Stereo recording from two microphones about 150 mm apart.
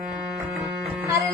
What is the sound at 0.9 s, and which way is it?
Music, 10° right (ahead or behind).